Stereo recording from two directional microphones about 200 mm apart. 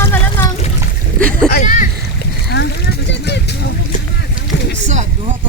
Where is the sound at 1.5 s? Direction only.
45° left (ahead or behind).